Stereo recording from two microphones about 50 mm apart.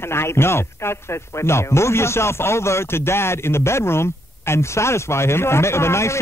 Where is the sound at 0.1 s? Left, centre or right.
Left.